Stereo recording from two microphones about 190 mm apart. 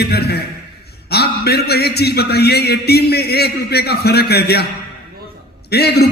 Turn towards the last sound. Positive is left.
turn(degrees=60)  # may be behind; listen again after turning